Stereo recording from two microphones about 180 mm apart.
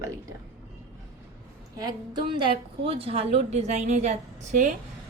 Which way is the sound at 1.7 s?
25° right (ahead or behind).